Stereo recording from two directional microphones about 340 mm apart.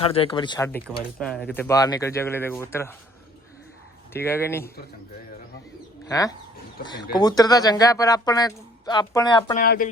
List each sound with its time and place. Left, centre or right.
0.0 s speech: centre
4.1 s speech: centre
6.1 s speech: centre
9.6 s speech: left